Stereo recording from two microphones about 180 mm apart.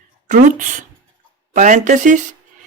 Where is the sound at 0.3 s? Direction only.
50° right (ahead or behind).